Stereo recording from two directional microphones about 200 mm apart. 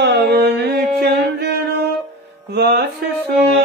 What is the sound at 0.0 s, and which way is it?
Music, 55° right (ahead or behind).